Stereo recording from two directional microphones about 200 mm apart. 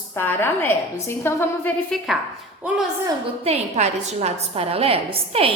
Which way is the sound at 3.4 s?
30° right (ahead or behind).